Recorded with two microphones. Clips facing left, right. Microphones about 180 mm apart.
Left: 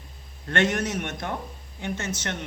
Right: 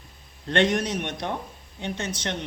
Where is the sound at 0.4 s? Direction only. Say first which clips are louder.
Right 2 dB; 15° right (ahead or behind).